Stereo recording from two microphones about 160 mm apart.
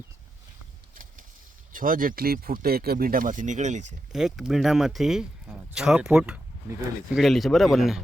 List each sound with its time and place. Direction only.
1.7 s speech: 60° right (ahead or behind)
4.1 s speech: centre (ahead or behind)